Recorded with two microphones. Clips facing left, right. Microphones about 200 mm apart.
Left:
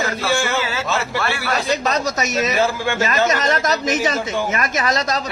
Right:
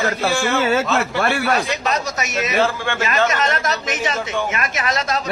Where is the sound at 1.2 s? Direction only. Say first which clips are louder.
Right 4 dB; 50° right (ahead or behind).